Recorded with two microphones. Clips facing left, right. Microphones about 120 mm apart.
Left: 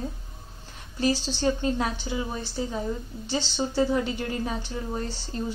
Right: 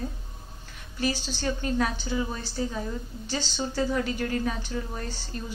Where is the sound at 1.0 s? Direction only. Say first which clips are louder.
Left 4 dB; 30° left (ahead or behind).